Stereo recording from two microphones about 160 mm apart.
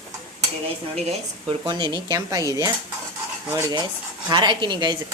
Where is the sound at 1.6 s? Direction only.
30° right (ahead or behind).